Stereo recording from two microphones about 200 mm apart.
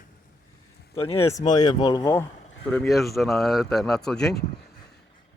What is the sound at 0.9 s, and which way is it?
Speech, 30° left (ahead or behind).